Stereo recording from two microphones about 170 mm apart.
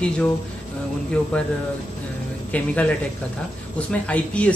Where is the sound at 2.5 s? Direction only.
10° left (ahead or behind).